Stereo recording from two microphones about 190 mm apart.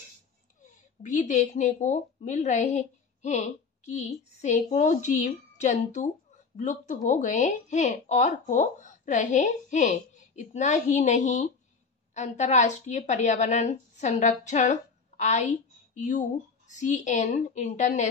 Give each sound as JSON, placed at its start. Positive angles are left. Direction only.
{"t": 1.0, "sound": "a woman's voice", "side_deg": 40}